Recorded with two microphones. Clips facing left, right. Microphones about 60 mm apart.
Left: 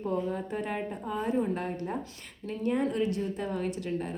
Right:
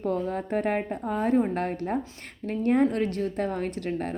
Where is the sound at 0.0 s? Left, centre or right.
Right.